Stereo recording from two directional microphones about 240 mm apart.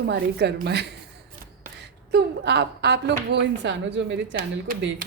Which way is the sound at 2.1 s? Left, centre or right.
Right.